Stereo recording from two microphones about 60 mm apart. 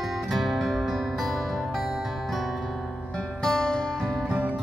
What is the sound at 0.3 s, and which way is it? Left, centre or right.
Music, centre.